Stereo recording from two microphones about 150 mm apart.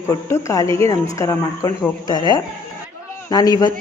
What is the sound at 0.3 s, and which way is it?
A woman's voice, 20° left (ahead or behind).